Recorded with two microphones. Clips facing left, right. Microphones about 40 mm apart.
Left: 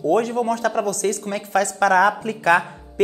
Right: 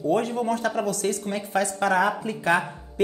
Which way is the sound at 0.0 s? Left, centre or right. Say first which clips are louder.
Left 4 dB; left.